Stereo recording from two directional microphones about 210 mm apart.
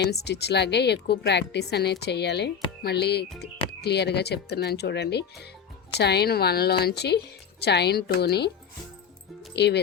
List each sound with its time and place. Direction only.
0.0 s speech: 50° left (ahead or behind)
9.6 s speech: 55° left (ahead or behind)